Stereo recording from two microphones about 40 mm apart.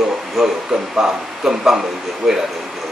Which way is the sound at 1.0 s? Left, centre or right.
Centre.